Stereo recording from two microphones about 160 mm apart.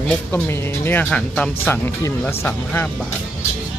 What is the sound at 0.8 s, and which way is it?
Speech, 10° left (ahead or behind).